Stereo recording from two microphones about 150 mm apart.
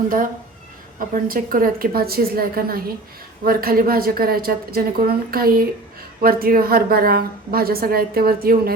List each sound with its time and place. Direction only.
0.9 s a woman's voice: 70° right (ahead or behind); by 8.7 s 85° right